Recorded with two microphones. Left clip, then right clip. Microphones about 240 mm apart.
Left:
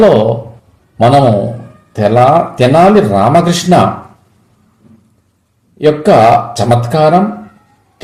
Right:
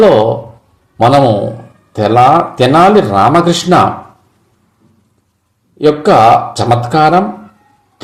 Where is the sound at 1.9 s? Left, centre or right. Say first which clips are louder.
Even; right.